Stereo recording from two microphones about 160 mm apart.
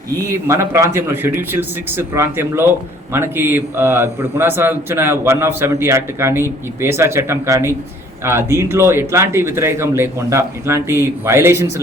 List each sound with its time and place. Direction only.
0.2 s a man's voice: 20° right (ahead or behind)